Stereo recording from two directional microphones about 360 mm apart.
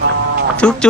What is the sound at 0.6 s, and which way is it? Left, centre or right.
Speech, centre.